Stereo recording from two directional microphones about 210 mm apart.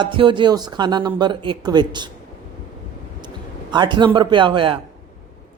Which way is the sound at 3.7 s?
20° right (ahead or behind).